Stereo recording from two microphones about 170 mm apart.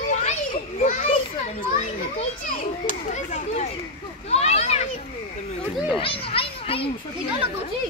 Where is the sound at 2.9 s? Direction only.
50° left (ahead or behind).